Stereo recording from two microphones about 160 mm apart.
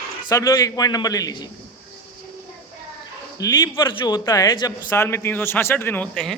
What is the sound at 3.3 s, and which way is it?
Speech, 25° left (ahead or behind).